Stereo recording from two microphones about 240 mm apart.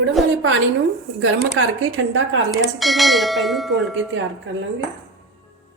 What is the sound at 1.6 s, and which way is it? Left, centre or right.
Speech, right.